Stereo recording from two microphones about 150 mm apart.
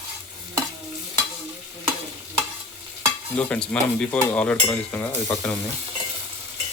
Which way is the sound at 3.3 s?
5° left (ahead or behind).